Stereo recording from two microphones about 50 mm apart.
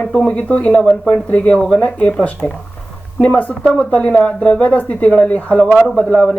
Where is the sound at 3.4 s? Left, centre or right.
Left.